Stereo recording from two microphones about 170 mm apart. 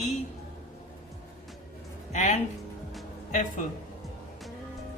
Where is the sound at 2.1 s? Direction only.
45° left (ahead or behind).